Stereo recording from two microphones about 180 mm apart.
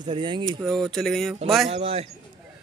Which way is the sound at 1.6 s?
35° right (ahead or behind).